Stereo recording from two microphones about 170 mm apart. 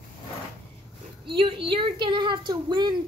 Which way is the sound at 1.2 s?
30° right (ahead or behind).